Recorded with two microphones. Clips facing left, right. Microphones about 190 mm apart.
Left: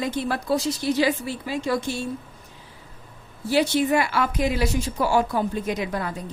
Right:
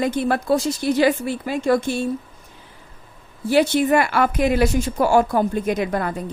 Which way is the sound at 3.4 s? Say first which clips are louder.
Right 4 dB; 55° right (ahead or behind).